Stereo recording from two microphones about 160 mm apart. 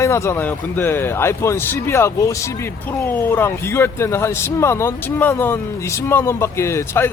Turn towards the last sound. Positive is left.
turn(degrees=15)  # may be behind; listen again after turning